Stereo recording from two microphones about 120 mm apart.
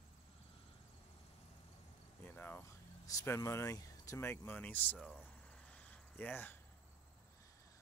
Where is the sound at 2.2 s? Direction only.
15° left (ahead or behind).